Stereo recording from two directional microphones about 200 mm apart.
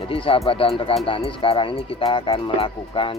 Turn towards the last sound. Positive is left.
turn(degrees=25)  # may be behind; listen again after turning